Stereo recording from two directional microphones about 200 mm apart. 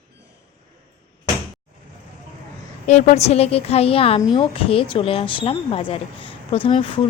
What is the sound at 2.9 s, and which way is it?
A woman's voice, 35° left (ahead or behind).